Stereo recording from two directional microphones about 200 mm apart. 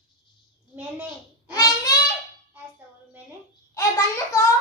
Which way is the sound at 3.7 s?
15° left (ahead or behind).